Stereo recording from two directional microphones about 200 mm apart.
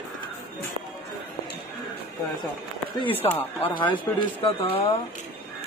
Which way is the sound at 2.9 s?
25° left (ahead or behind).